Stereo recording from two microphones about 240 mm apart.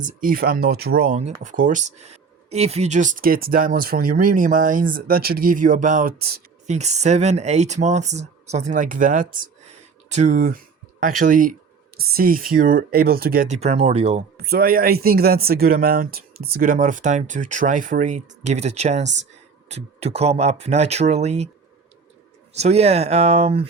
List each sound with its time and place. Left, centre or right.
0.0 s speech: right
9.3 s a sound: right
11.0 s speech: right
14.3 s speech: right
22.5 s speech: right